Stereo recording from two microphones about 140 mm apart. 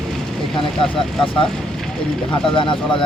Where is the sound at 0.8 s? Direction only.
5° left (ahead or behind).